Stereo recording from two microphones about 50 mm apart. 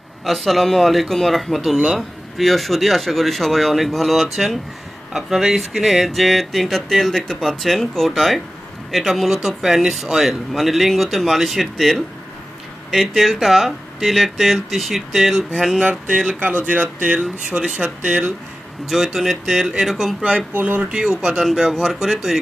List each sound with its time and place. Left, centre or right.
0.3 s speech: centre
1.7 s speech: centre
2.4 s speech: centre
15.8 s speech: right
18.9 s speech: centre
20.5 s speech: right
20.9 s speech: centre